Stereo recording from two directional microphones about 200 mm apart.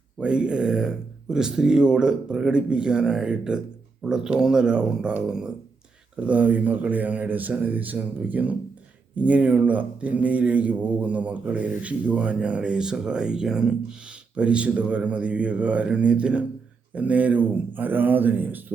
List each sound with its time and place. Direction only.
0.2 s speech: 5° right (ahead or behind)